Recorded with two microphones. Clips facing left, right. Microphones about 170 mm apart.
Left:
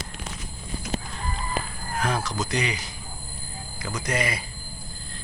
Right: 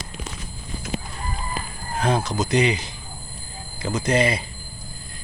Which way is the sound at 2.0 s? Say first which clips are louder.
Right 5 dB; 25° right (ahead or behind).